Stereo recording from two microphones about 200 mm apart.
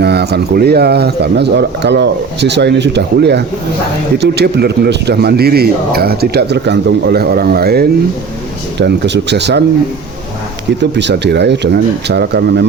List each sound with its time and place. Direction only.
0.0 s speech: 55° right (ahead or behind)
10.8 s speech: 60° right (ahead or behind)